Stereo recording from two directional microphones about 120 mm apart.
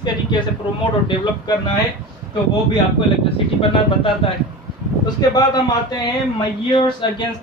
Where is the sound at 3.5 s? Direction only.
50° left (ahead or behind).